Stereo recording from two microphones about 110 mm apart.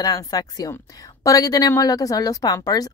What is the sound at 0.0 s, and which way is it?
A woman's voice, 35° left (ahead or behind).